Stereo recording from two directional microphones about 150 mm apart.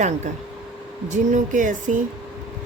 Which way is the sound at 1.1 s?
55° right (ahead or behind).